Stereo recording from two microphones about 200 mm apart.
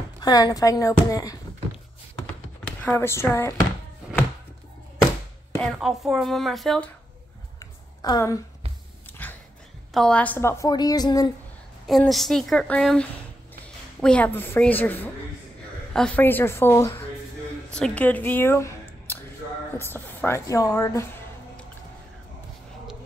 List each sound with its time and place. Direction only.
0.2 s a woman's voice: 20° left (ahead or behind)
2.6 s speech: 10° left (ahead or behind)
5.6 s speech: centre (ahead or behind)
7.5 s a sound: 15° left (ahead or behind)
9.9 s a woman's voice: 5° left (ahead or behind)
11.9 s a woman's voice: centre (ahead or behind)